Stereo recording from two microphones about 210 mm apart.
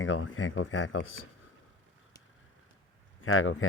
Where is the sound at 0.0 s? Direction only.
65° left (ahead or behind).